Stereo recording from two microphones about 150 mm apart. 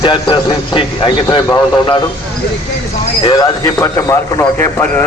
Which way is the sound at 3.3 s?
25° left (ahead or behind).